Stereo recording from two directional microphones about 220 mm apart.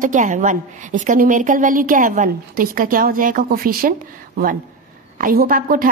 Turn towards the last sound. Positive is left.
turn(degrees=-40)  # may be behind; listen again after turning